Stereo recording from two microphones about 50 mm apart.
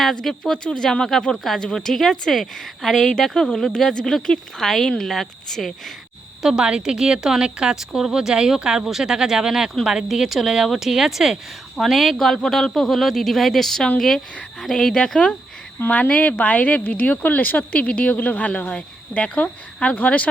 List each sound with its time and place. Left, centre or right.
0.0 s speech: centre
6.4 s a woman's voice: centre
15.9 s speech: left